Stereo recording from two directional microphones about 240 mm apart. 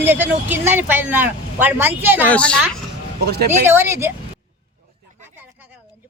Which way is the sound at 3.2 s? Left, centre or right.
Right.